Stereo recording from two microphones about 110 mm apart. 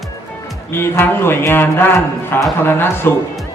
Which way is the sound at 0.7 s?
20° left (ahead or behind).